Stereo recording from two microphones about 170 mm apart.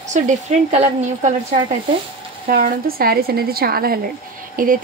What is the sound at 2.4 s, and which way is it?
A woman's voice, 60° right (ahead or behind).